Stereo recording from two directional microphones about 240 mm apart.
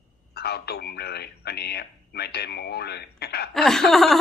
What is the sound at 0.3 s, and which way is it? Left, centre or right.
Speech, left.